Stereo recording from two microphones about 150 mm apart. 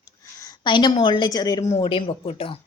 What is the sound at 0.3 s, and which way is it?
A woman's voice, 25° left (ahead or behind).